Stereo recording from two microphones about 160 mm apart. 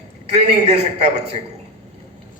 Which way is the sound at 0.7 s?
45° right (ahead or behind).